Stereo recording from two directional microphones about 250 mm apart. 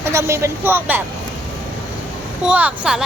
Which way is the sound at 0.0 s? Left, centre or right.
Centre.